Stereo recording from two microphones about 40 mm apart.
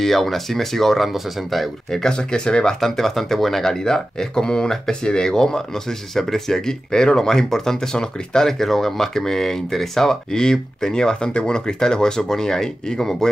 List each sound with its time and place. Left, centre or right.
0.0 s speech: centre
2.1 s speech: left
2.8 s speech: centre